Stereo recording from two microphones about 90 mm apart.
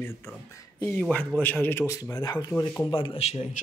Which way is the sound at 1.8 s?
35° left (ahead or behind).